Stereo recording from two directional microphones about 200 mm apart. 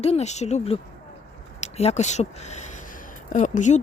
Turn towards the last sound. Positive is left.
turn(degrees=40)  # may be behind; listen again after turning